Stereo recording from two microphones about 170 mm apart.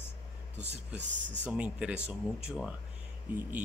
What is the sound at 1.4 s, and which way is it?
Speech, 5° right (ahead or behind).